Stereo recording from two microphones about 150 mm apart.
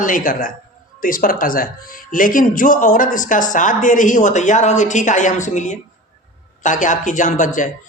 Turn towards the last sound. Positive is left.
turn(degrees=60)  # may be behind; listen again after turning